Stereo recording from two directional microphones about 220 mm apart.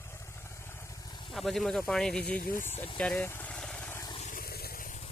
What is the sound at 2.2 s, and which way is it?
Speech, 45° left (ahead or behind).